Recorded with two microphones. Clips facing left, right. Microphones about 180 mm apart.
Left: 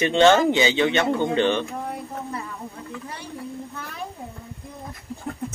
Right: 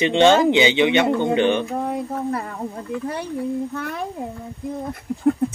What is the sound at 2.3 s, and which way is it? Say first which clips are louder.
Speech: right 5 dB; 60° right (ahead or behind).